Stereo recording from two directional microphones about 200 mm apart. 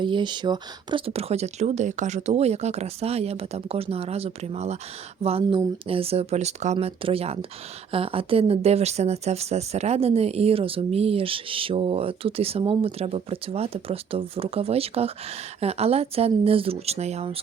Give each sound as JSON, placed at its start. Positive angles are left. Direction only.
{"t": 0.0, "sound": "speech", "side_deg": -25}